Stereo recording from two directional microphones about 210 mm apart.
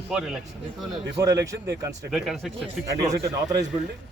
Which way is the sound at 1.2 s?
15° right (ahead or behind).